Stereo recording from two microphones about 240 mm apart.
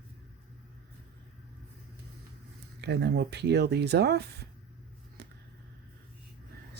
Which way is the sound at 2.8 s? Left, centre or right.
Right.